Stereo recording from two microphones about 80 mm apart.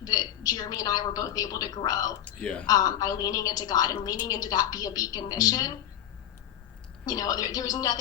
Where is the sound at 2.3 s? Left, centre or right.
Centre.